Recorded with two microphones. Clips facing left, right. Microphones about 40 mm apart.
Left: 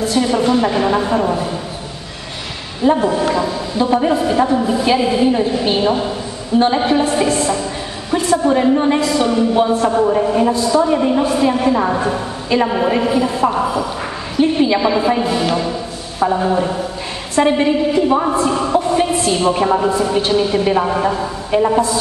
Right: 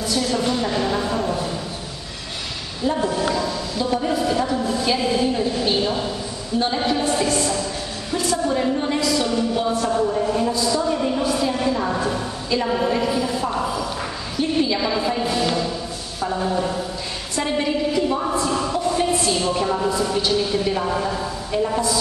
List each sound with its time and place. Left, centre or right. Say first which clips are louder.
0.2 s a woman's voice: left 8 dB; left
2.8 s a woman's voice: left 7 dB; left
21.5 s a woman's voice: left 8 dB; left